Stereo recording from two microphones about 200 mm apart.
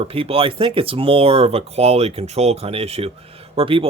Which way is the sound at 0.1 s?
30° right (ahead or behind).